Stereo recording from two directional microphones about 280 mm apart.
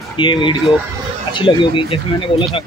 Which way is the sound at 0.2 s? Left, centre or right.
Centre.